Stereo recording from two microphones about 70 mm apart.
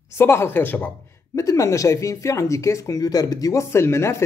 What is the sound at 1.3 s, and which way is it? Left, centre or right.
Speech, left.